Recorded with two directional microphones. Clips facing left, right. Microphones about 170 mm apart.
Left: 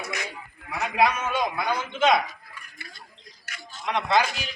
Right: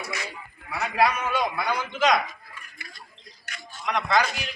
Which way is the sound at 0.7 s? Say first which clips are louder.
Even; centre (ahead or behind).